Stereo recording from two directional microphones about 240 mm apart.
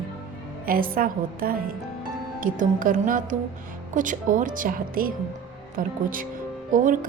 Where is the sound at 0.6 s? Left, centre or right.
Right.